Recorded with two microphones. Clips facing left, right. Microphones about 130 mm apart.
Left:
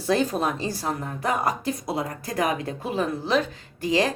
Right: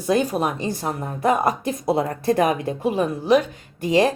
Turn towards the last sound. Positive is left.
turn(degrees=-20)  # may be behind; listen again after turning